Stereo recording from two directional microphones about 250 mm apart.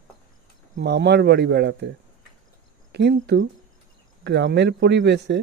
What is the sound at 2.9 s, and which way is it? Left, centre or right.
Speech, right.